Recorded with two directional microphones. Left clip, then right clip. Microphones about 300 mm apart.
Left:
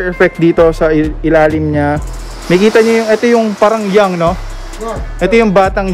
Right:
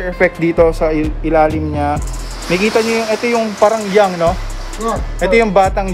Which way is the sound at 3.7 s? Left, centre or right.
Left.